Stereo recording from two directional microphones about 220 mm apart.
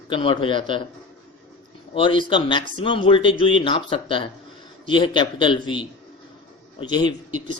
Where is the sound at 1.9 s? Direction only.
25° left (ahead or behind).